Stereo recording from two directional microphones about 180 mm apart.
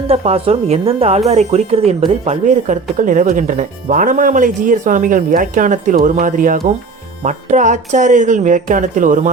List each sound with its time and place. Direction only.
0.1 s a woman's voice: 35° right (ahead or behind)